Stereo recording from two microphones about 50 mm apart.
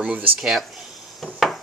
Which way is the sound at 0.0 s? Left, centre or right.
Right.